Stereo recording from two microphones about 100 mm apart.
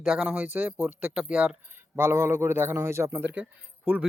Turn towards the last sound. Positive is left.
turn(degrees=-10)  # may be behind; listen again after turning